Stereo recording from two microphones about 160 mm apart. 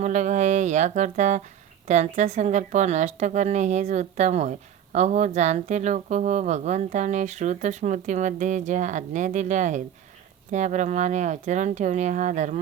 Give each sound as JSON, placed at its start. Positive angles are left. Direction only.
{"t": 0.0, "sound": "a woman's voice", "side_deg": -50}